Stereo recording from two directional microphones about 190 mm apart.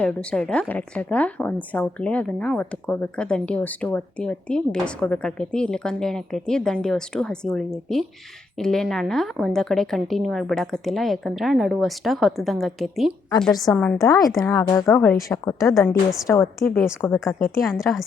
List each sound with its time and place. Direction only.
0.0 s a woman's voice: 5° left (ahead or behind)
14.3 s speech: 15° left (ahead or behind)
17.2 s a woman's voice: centre (ahead or behind)